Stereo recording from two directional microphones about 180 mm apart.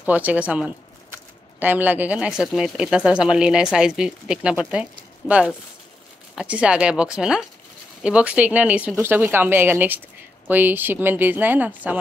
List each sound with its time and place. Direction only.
0.0 s speech: 10° right (ahead or behind)
6.3 s speech: 5° right (ahead or behind)